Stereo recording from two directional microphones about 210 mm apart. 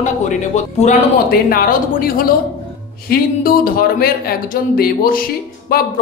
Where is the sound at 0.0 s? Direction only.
35° left (ahead or behind).